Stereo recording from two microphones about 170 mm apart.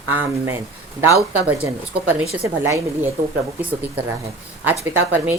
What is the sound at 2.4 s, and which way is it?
Speech, 15° right (ahead or behind).